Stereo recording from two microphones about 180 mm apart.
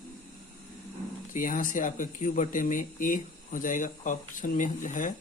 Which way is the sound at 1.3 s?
50° left (ahead or behind).